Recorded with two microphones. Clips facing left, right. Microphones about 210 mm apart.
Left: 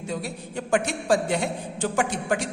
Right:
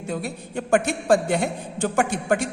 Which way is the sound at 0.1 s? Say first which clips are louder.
Right 3 dB; 55° right (ahead or behind).